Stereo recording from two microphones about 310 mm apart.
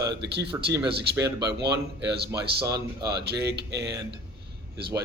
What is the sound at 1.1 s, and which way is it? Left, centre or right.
Speech, centre.